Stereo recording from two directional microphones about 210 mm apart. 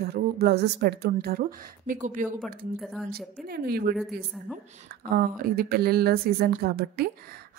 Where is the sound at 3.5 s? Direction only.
45° right (ahead or behind).